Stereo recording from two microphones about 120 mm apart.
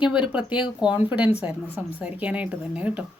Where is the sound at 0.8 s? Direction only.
10° right (ahead or behind).